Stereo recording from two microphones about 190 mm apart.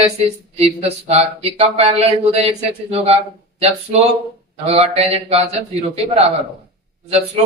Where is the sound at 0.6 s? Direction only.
35° right (ahead or behind).